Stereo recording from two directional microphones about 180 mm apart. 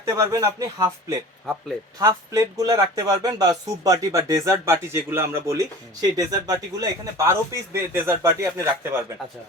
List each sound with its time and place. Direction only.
0.0 s speech: 15° right (ahead or behind)
2.0 s speech: 20° right (ahead or behind)